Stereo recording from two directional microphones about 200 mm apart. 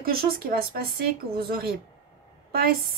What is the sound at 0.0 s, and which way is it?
Speech, 45° right (ahead or behind).